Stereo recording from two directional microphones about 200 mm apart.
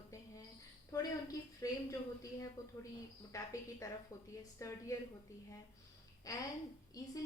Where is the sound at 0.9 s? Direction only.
15° left (ahead or behind).